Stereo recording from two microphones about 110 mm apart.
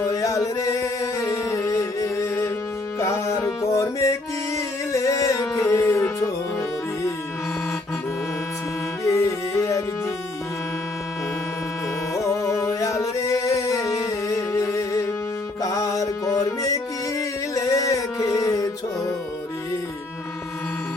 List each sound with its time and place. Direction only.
0.1 s music: 30° left (ahead or behind)
9.0 s music: 25° left (ahead or behind)
12.1 s music: 30° left (ahead or behind)